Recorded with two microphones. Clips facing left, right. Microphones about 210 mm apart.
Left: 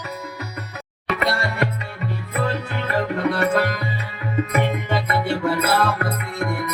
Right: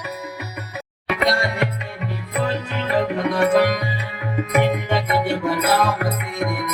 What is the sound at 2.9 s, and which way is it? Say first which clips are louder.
Music: right 2 dB; 15° right (ahead or behind).